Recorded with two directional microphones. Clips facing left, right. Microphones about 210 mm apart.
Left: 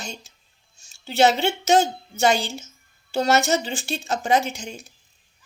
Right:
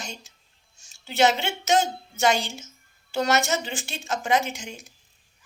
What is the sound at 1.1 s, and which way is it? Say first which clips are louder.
Speech: left 3 dB; 35° left (ahead or behind).